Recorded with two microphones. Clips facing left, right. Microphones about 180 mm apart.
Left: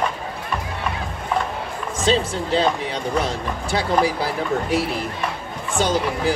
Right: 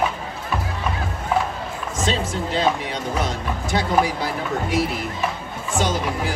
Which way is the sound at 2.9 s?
35° left (ahead or behind).